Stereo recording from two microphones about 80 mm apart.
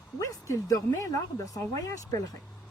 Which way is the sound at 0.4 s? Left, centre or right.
Left.